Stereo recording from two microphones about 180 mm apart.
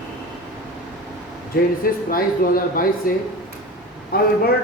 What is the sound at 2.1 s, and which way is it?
Speech, 50° left (ahead or behind).